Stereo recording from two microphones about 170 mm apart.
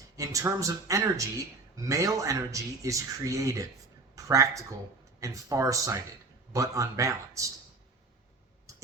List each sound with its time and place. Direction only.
0.2 s speech: 20° right (ahead or behind)